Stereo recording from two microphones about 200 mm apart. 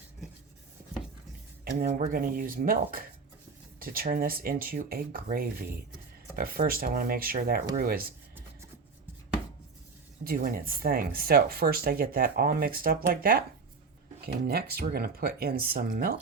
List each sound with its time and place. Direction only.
1.8 s speech: 45° right (ahead or behind)
10.2 s speech: 45° right (ahead or behind)
14.4 s speech: 50° right (ahead or behind)